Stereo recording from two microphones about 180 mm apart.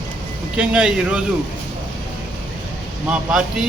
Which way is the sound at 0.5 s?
5° right (ahead or behind).